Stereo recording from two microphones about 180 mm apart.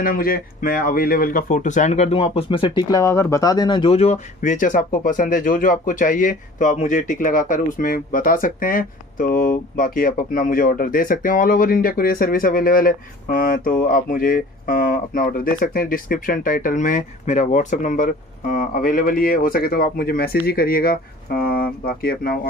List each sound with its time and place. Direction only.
0.0 s speech: 50° left (ahead or behind)